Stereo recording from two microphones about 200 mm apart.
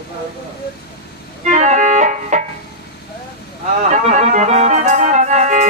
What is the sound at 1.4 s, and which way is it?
Music, 35° right (ahead or behind).